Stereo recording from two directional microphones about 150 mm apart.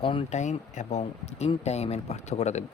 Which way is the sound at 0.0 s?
35° left (ahead or behind).